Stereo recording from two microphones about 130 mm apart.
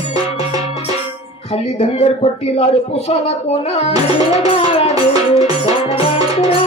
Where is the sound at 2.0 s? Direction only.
50° left (ahead or behind).